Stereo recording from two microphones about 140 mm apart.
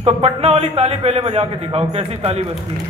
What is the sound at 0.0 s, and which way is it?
Speech, 50° right (ahead or behind).